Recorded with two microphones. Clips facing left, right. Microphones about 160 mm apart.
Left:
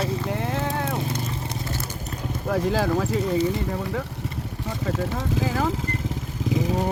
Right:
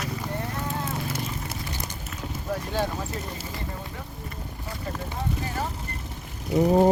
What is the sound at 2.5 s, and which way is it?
Speech, 90° left.